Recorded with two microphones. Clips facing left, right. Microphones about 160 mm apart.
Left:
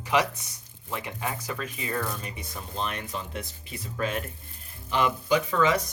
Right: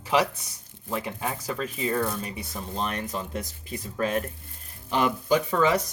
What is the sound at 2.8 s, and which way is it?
Speech, 40° right (ahead or behind).